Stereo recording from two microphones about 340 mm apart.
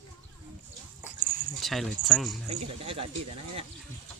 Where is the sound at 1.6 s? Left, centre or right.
Centre.